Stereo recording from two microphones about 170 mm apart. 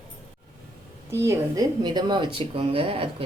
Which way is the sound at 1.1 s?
15° right (ahead or behind).